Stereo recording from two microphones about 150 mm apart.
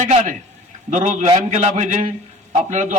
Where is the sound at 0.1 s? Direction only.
50° right (ahead or behind).